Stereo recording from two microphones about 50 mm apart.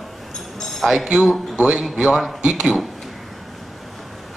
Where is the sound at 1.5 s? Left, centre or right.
Centre.